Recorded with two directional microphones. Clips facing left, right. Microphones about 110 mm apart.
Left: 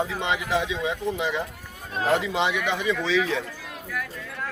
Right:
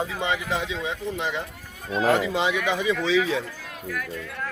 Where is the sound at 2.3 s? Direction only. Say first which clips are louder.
Right 1 dB; 5° right (ahead or behind).